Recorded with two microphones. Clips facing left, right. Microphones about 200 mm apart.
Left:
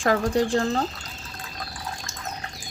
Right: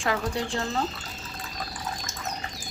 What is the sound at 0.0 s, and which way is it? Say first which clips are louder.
Speech: left 6 dB; 45° left (ahead or behind).